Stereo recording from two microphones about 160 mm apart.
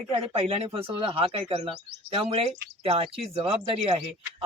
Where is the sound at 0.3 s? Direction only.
35° right (ahead or behind).